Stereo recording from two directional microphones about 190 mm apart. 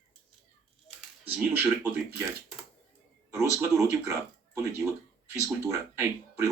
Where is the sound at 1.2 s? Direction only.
10° right (ahead or behind).